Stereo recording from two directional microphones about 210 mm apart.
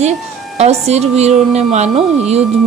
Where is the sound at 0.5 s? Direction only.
30° right (ahead or behind).